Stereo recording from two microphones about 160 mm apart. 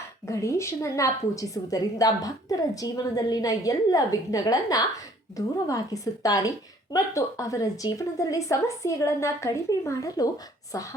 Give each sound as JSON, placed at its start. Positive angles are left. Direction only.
{"t": 0.3, "sound": "a woman's voice", "side_deg": 20}